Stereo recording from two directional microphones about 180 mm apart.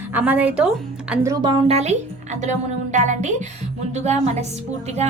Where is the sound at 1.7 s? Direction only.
35° right (ahead or behind).